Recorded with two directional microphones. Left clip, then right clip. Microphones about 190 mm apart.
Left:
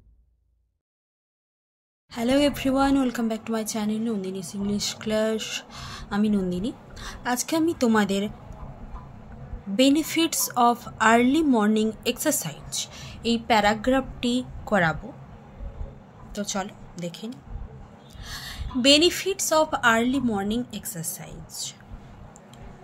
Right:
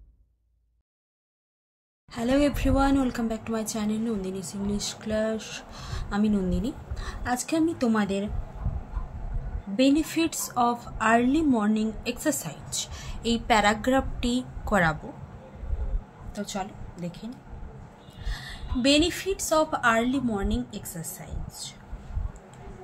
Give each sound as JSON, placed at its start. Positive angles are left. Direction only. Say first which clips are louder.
{"t": 2.1, "sound": "speech", "louder": "left 2 dB", "side_deg": 20}
{"t": 9.8, "sound": "a woman's voice", "louder": "left 2 dB", "side_deg": 25}
{"t": 16.3, "sound": "a woman's voice", "louder": "left 3 dB", "side_deg": 35}